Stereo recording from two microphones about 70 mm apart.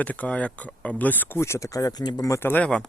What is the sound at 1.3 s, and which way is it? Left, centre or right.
Speech, left.